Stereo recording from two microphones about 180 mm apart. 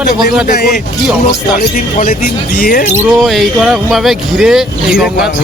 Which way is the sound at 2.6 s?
50° left (ahead or behind).